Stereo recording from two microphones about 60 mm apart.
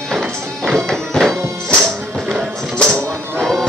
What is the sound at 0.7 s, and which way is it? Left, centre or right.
Music, centre.